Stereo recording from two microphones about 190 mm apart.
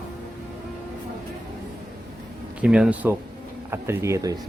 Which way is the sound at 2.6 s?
5° right (ahead or behind).